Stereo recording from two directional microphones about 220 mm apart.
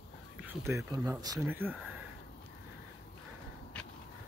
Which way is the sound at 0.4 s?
10° right (ahead or behind).